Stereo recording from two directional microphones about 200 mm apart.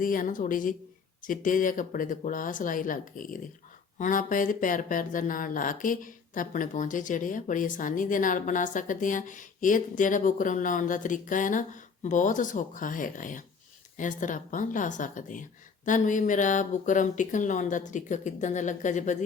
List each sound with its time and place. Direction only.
0.0 s a woman's voice: 45° left (ahead or behind)